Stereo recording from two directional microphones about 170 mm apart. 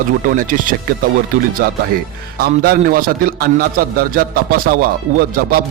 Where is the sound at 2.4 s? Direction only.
60° right (ahead or behind).